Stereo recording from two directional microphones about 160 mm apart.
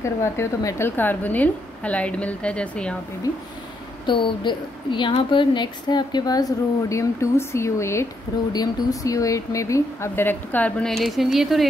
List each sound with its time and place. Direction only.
0.0 s a woman's voice: 15° left (ahead or behind)
4.0 s a woman's voice: 30° left (ahead or behind); by 11.6 s centre (ahead or behind)